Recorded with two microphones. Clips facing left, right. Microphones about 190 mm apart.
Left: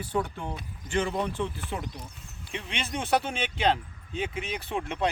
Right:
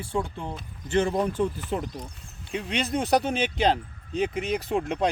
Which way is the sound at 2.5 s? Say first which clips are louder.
Right 7 dB; 35° right (ahead or behind).